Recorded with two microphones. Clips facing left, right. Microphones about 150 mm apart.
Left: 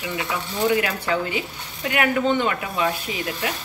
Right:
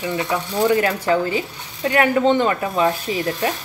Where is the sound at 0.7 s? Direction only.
35° right (ahead or behind).